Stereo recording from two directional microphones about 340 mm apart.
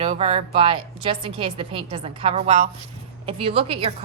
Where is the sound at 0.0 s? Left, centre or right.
Centre.